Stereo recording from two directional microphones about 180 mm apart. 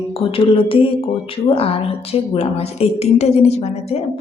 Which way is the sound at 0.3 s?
30° left (ahead or behind).